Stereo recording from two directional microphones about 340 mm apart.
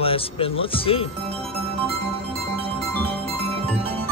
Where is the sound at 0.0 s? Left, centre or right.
Centre.